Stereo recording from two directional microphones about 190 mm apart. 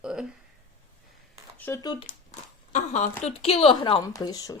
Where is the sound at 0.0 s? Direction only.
5° right (ahead or behind).